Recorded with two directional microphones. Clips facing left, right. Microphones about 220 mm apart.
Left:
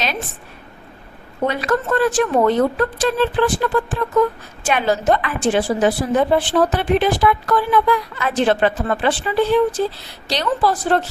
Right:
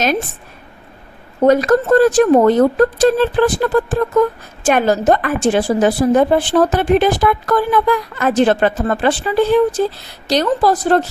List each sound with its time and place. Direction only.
1.5 s a woman's voice: 45° right (ahead or behind)